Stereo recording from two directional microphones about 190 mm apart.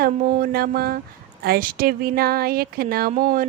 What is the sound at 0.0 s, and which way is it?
Speech, 50° right (ahead or behind).